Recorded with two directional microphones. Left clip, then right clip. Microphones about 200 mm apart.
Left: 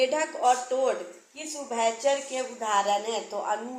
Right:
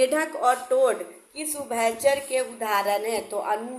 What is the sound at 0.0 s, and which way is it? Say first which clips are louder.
Speech: right 2 dB; 45° right (ahead or behind).